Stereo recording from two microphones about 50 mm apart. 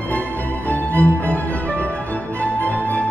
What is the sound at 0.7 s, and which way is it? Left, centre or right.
Music, left.